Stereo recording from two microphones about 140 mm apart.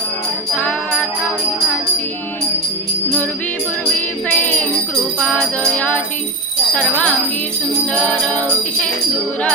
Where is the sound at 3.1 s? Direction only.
10° left (ahead or behind).